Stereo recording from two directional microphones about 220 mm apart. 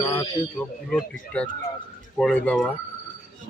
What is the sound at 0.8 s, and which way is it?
Speech, centre (ahead or behind).